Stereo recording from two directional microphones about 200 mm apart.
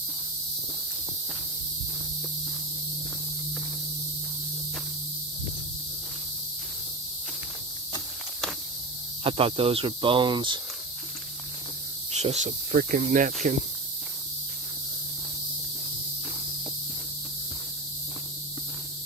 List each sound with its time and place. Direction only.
9.2 s speech: 30° right (ahead or behind)
12.1 s speech: 35° right (ahead or behind)